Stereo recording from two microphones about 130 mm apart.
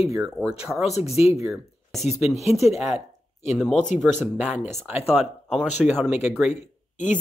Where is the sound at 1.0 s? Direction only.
55° left (ahead or behind).